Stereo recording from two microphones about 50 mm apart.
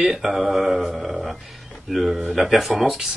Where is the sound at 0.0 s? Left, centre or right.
Centre.